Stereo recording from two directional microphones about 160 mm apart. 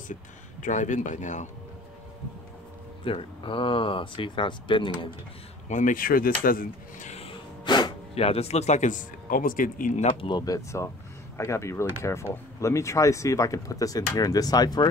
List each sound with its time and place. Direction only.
0.1 s speech: 50° left (ahead or behind)
3.0 s speech: 35° left (ahead or behind)
5.7 s speech: 50° left (ahead or behind)
10.2 s speech: 25° left (ahead or behind)